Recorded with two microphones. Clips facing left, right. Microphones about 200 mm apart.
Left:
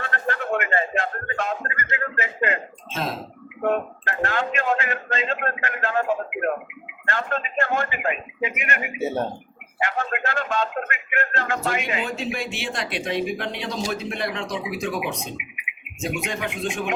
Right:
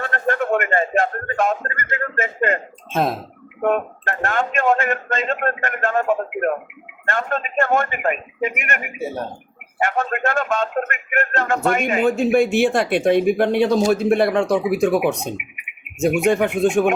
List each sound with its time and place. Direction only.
0.0 s a man's voice: 50° right (ahead or behind)
7.1 s a man's voice: 50° right (ahead or behind)